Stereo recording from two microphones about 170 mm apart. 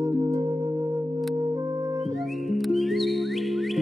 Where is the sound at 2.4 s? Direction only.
Centre (ahead or behind).